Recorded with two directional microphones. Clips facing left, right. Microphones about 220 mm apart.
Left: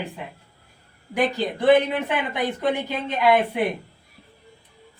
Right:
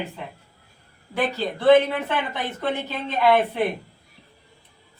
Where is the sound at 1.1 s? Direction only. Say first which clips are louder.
Left 2 dB; 15° left (ahead or behind).